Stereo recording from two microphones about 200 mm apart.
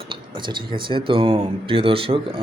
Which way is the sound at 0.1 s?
25° right (ahead or behind).